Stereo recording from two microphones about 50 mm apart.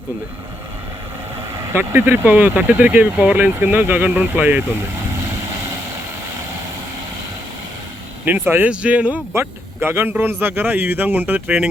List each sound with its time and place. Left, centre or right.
1.7 s speech: right
8.2 s speech: right
8.7 s speech: right
9.3 s speech: right